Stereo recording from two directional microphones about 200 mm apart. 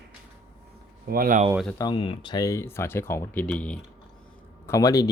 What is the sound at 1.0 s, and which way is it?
Speech, 45° right (ahead or behind).